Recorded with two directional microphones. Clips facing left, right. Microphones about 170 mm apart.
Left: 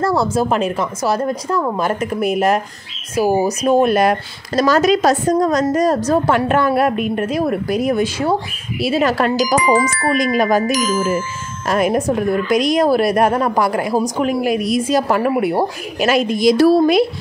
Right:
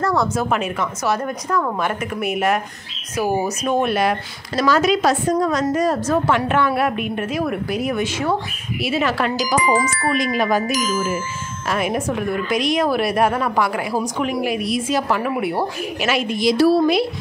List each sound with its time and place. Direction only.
0.0 s speech: 30° left (ahead or behind)
9.6 s speech: 70° left (ahead or behind)
10.0 s a woman's voice: 45° left (ahead or behind)
10.7 s speech: 70° left (ahead or behind)
11.6 s a woman's voice: 40° left (ahead or behind)